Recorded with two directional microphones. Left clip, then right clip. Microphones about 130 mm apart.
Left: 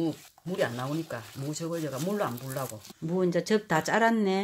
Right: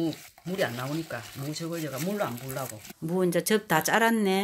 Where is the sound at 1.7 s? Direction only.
30° left (ahead or behind).